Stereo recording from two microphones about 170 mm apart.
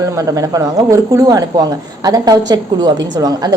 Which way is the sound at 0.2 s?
20° right (ahead or behind).